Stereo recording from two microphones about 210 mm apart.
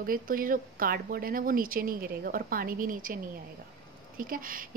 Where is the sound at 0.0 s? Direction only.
40° right (ahead or behind).